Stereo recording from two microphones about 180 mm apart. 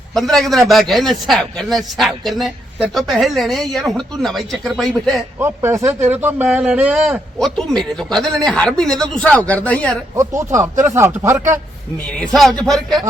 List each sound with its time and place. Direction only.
0.1 s speech: centre (ahead or behind)
5.4 s speech: 15° right (ahead or behind); by 10.0 s 5° left (ahead or behind)
10.2 s speech: 15° right (ahead or behind)
12.0 s speech: 5° left (ahead or behind)